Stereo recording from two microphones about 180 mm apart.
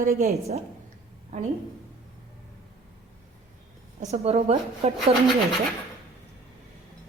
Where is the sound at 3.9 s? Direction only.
40° right (ahead or behind).